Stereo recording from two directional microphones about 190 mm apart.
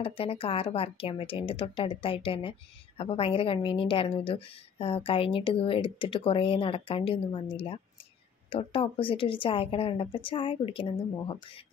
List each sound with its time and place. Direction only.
0.0 s a woman's voice: 30° left (ahead or behind)